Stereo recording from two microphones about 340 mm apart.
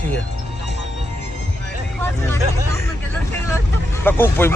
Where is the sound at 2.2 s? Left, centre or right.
Centre.